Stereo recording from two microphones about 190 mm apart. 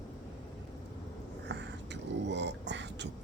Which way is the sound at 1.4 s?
65° right (ahead or behind).